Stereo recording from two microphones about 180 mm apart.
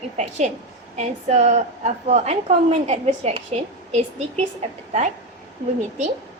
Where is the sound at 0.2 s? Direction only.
40° right (ahead or behind).